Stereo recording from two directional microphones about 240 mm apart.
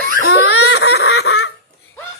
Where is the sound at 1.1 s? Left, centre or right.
Left.